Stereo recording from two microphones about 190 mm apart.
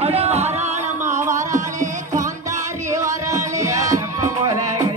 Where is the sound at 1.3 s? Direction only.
40° right (ahead or behind).